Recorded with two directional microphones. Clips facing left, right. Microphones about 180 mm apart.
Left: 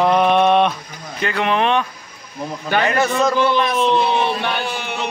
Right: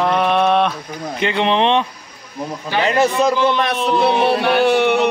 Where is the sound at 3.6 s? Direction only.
65° right (ahead or behind).